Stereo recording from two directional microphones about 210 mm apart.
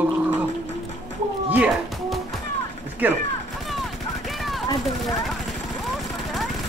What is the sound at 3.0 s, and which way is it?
Speech, 10° right (ahead or behind).